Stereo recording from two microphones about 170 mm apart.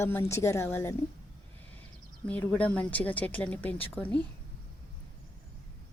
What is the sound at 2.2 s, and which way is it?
Speech, 10° left (ahead or behind).